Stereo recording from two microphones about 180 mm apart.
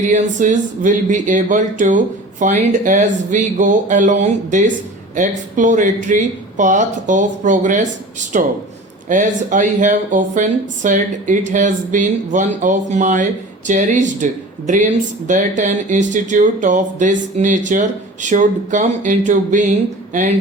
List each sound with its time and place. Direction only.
0.0 s speech: 45° right (ahead or behind)
15.3 s speech: 45° right (ahead or behind)